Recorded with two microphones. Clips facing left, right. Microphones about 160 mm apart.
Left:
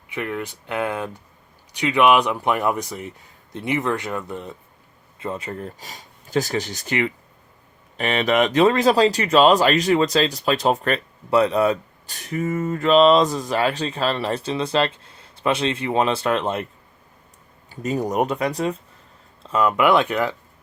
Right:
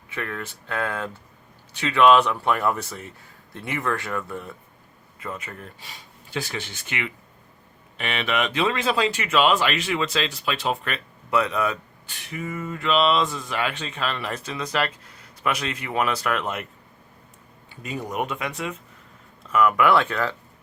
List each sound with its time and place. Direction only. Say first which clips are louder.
0.1 s a man's voice: left 5 dB; 15° left (ahead or behind)
5.2 s speech: left 6 dB; 30° left (ahead or behind)
17.7 s speech: left 8 dB; 40° left (ahead or behind); by 20.3 s 15° left (ahead or behind)